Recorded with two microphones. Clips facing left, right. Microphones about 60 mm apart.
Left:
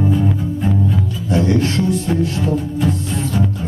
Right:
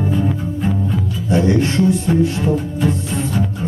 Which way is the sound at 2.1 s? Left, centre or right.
Centre.